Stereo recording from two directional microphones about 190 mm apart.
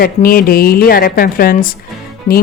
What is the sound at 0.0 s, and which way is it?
A woman's voice, 50° left (ahead or behind).